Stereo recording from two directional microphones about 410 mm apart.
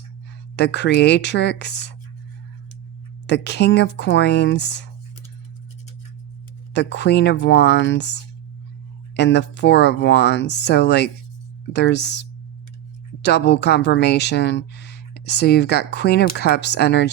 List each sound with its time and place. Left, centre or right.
0.5 s a woman's voice: left
3.2 s a woman's voice: left
6.7 s a woman's voice: left